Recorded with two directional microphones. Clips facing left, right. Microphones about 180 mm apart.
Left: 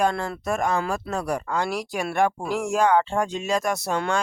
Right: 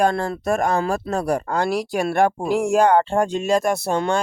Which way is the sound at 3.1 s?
55° right (ahead or behind).